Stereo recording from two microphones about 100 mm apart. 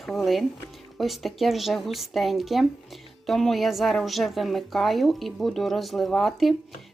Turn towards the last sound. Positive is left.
turn(degrees=0)  # may be behind; listen again after turning